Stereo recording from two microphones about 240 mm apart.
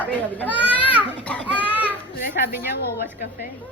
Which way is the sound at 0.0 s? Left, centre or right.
Centre.